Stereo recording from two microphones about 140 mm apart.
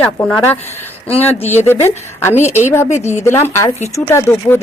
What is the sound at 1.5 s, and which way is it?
Speech, 15° left (ahead or behind).